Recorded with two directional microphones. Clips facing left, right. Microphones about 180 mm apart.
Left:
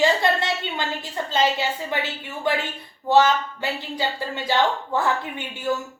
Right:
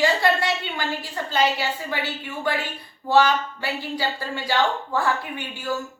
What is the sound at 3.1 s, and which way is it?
A woman's voice, 20° left (ahead or behind).